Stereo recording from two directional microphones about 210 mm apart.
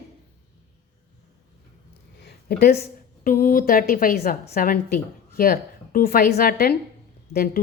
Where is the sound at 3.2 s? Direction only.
40° left (ahead or behind).